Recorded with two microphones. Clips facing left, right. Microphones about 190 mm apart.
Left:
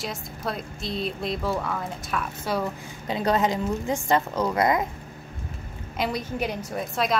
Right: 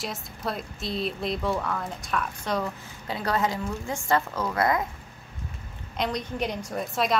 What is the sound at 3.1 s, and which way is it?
A woman's voice, 20° left (ahead or behind).